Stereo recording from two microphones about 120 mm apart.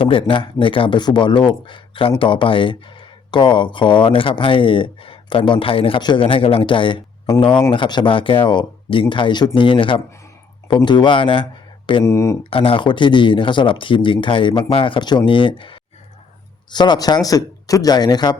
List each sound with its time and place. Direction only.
0.0 s speech: 45° left (ahead or behind)
12.0 s speech: 25° left (ahead or behind)
12.4 s speech: 50° left (ahead or behind)